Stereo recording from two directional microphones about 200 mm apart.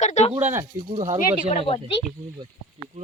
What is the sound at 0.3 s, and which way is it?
Speech, 10° right (ahead or behind).